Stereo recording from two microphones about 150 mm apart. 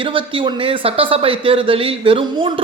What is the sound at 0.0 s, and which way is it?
Speech, 35° right (ahead or behind).